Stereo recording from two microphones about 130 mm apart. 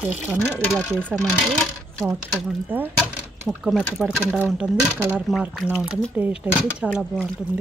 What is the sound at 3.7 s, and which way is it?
Speech, 5° right (ahead or behind).